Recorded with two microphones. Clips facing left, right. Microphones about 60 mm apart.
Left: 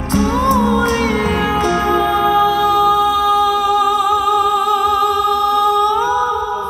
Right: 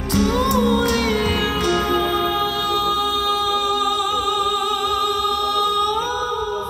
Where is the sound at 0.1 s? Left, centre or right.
Left.